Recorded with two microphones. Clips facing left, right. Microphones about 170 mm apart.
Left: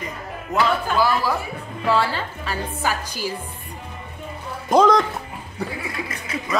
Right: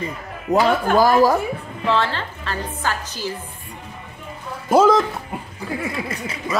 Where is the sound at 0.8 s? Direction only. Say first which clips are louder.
Right 6 dB; 45° right (ahead or behind).